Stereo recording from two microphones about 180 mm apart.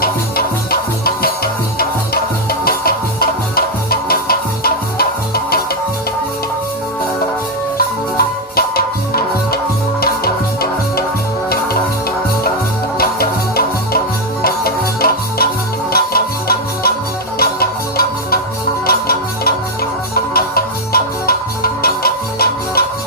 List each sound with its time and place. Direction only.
0.0 s music: 55° left (ahead or behind)
8.1 s music: 55° left (ahead or behind)
13.0 s music: 55° left (ahead or behind)